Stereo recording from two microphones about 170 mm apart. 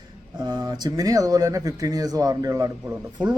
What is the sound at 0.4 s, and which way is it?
A man's voice, 25° right (ahead or behind).